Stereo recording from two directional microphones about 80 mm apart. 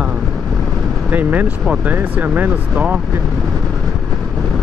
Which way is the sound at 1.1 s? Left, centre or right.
Right.